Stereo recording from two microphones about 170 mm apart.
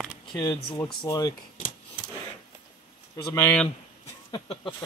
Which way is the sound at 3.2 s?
20° left (ahead or behind).